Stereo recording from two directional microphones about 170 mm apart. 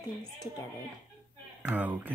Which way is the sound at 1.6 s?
10° right (ahead or behind).